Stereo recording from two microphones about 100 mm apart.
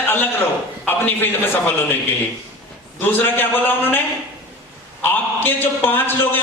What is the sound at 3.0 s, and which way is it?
A man's voice, 20° left (ahead or behind).